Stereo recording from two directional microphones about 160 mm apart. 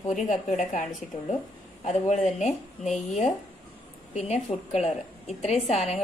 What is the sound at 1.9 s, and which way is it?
A woman's voice, 50° left (ahead or behind).